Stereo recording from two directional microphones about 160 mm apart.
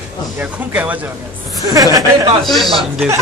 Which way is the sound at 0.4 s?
10° right (ahead or behind).